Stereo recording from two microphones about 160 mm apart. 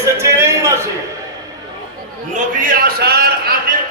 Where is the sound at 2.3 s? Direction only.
55° right (ahead or behind); by 3.7 s 70° right (ahead or behind).